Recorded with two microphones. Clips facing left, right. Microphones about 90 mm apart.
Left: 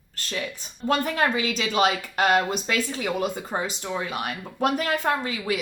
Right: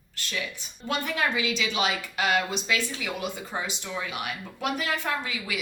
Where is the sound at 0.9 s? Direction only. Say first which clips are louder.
Left 5 dB; 40° left (ahead or behind).